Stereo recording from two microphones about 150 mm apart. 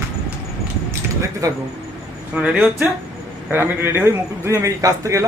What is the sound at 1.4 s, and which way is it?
Speech, 25° right (ahead or behind).